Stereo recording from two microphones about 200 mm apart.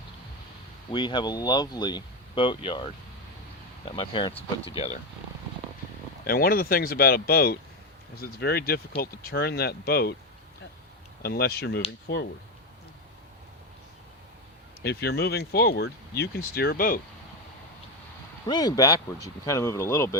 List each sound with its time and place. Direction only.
0.9 s speech: 20° left (ahead or behind)
3.9 s speech: 25° left (ahead or behind)
6.2 s speech: 50° left (ahead or behind)
11.2 s speech: 50° left (ahead or behind)
14.8 s speech: 55° left (ahead or behind)
18.4 s speech: 20° left (ahead or behind)